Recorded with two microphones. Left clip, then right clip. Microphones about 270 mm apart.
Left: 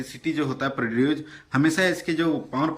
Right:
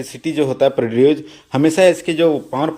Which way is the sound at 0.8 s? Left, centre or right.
Right.